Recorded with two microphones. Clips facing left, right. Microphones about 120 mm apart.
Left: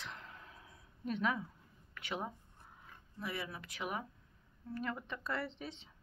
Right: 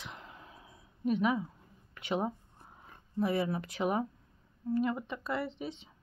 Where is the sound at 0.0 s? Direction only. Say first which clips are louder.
Right 2 dB; 15° right (ahead or behind).